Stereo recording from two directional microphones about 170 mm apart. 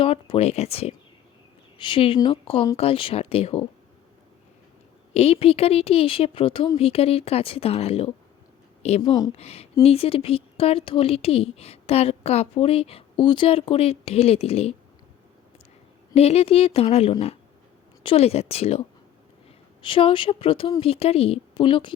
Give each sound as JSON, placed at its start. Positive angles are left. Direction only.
{"t": 0.0, "sound": "speech", "side_deg": 35}
{"t": 5.1, "sound": "speech", "side_deg": 35}
{"t": 9.0, "sound": "speech", "side_deg": 25}
{"t": 9.3, "sound": "speech", "side_deg": 35}
{"t": 16.1, "sound": "speech", "side_deg": 35}
{"t": 19.8, "sound": "speech", "side_deg": 30}